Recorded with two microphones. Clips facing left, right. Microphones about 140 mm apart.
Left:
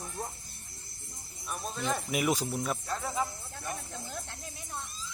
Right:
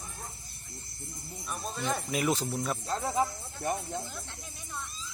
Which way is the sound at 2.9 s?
30° right (ahead or behind).